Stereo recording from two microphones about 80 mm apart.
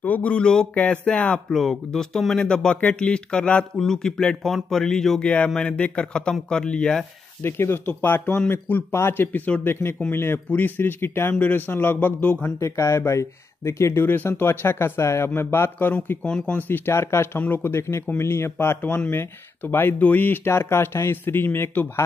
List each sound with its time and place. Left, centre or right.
0.0 s speech: centre
1.5 s speech: centre
7.4 s speech: left
12.5 s speech: left
14.0 s speech: left